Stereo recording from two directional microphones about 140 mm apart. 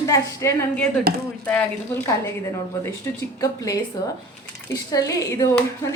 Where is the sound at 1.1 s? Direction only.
90° right.